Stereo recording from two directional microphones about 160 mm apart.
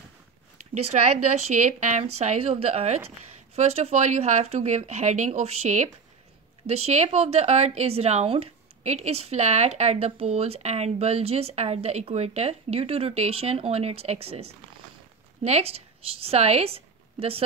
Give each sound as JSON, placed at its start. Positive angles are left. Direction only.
{"t": 0.9, "sound": "a woman's voice", "side_deg": -45}